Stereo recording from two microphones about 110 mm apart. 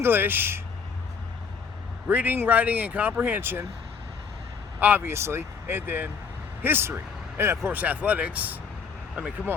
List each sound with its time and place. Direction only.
0.0 s speech: 20° right (ahead or behind)
2.0 s speech: 15° right (ahead or behind)
4.8 s speech: 15° right (ahead or behind)